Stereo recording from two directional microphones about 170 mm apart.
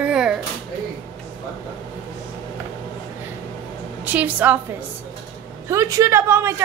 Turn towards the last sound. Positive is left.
turn(degrees=-15)  # may be behind; listen again after turning